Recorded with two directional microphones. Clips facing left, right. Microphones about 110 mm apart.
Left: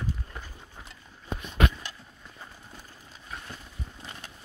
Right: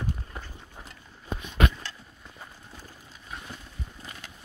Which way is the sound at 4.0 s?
25° left (ahead or behind).